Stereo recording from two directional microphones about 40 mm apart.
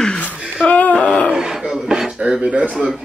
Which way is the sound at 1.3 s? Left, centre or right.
Centre.